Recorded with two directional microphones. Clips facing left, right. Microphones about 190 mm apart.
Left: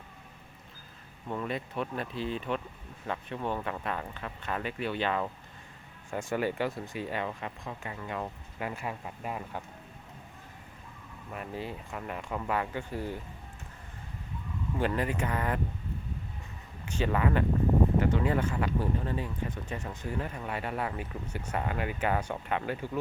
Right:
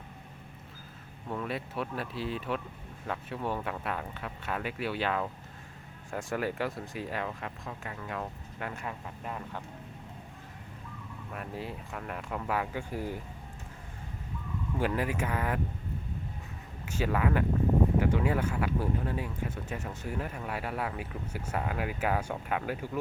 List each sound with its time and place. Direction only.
1.3 s speech: centre (ahead or behind)
11.3 s speech: centre (ahead or behind)
14.8 s speech: 10° right (ahead or behind)
16.8 s speech: 5° right (ahead or behind)